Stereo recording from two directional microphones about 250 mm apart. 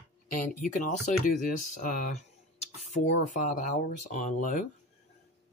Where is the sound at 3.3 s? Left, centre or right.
Left.